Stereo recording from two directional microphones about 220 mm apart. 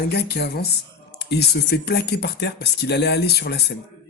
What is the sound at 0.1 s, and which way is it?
Speech, 45° left (ahead or behind).